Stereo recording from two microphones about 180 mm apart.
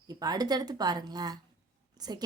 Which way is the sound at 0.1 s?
20° right (ahead or behind).